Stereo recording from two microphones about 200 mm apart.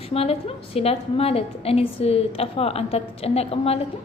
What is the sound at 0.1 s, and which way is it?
A woman's voice, 30° left (ahead or behind).